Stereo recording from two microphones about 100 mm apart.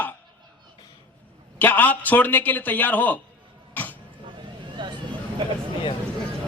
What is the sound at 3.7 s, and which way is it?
Throat clearing, 15° left (ahead or behind).